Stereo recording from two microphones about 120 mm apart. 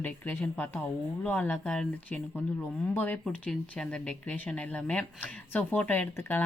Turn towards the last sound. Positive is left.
turn(degrees=15)  # may be behind; listen again after turning